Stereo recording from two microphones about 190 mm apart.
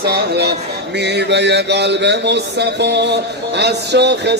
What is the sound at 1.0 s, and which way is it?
Speech, 65° right (ahead or behind).